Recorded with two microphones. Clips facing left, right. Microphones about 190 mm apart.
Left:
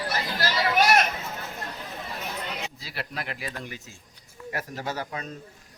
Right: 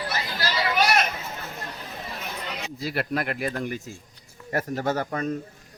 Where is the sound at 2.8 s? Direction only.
50° right (ahead or behind).